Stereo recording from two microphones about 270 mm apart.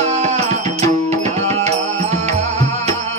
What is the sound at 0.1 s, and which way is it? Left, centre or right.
Music, right.